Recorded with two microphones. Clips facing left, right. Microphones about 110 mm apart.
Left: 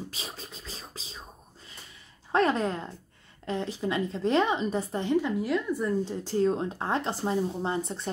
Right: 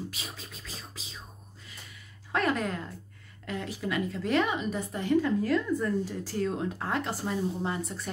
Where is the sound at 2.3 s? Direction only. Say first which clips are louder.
Left 4 dB; 30° left (ahead or behind).